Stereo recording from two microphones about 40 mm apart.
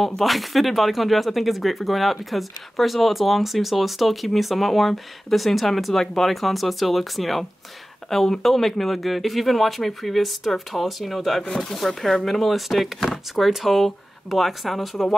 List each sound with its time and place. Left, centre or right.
0.2 s speech: centre